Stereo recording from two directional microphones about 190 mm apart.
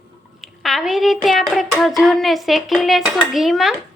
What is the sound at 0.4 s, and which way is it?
Hands, centre (ahead or behind).